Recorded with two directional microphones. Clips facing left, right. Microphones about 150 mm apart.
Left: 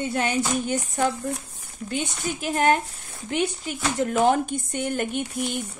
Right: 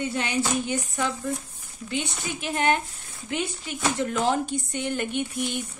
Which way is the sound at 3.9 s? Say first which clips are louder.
Left 6 dB; 55° left (ahead or behind).